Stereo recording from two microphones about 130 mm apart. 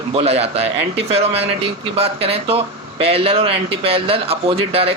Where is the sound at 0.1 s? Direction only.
50° right (ahead or behind).